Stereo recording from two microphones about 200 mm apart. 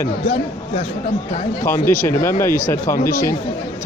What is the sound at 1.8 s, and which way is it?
Speech, 10° left (ahead or behind).